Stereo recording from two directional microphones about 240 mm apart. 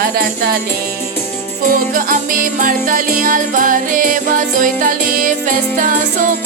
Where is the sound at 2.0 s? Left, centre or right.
Right.